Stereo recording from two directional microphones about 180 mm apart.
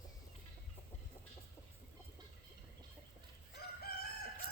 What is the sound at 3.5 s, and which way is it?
Crowing, 60° left (ahead or behind).